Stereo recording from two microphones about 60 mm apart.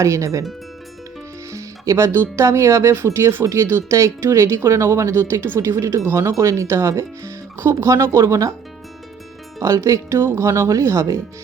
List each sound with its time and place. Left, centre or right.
0.0 s speech: right
1.5 s music: right
2.1 s speech: right
6.3 s speech: right
7.9 s speech: right
9.6 s speech: right
10.2 s speech: right
10.4 s speech: right